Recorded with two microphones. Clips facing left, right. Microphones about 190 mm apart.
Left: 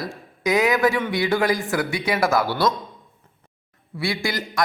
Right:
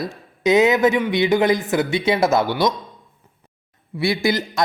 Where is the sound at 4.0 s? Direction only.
20° right (ahead or behind).